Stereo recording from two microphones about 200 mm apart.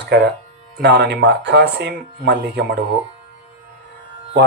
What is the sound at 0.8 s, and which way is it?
Speech, 55° right (ahead or behind).